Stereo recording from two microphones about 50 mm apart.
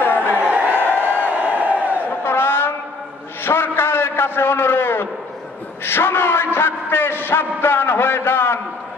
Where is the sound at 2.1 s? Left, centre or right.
Left.